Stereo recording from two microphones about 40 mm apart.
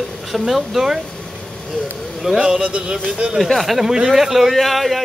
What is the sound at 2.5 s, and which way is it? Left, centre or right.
Speech, right.